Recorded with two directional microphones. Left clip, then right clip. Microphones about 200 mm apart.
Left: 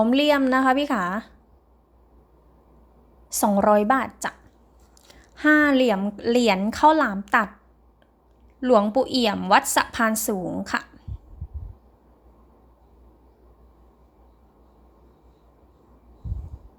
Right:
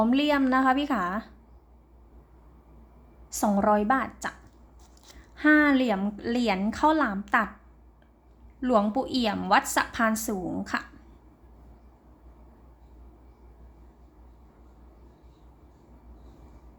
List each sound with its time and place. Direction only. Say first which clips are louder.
0.0 s speech: left 5 dB; 25° left (ahead or behind)
3.2 s speech: left 5 dB; 30° left (ahead or behind)
8.6 s speech: left 6 dB; 25° left (ahead or behind)